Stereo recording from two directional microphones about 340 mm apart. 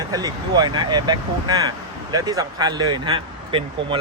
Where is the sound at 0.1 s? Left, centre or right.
Centre.